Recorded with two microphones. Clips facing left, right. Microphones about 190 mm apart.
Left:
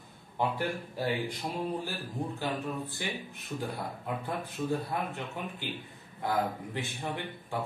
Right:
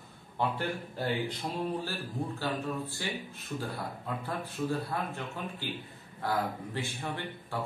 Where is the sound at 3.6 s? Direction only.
15° left (ahead or behind).